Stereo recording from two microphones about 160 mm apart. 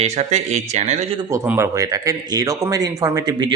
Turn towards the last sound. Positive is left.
turn(degrees=-25)  # may be behind; listen again after turning